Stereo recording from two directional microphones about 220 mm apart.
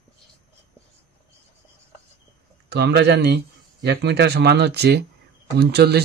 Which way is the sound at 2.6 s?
50° right (ahead or behind).